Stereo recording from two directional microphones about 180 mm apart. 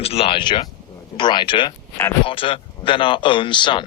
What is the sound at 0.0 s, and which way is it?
A man's voice, 35° left (ahead or behind).